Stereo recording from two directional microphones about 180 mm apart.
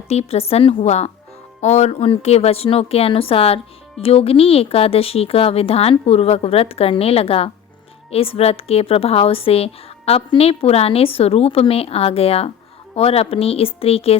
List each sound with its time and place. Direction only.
0.1 s a woman's voice: 35° left (ahead or behind)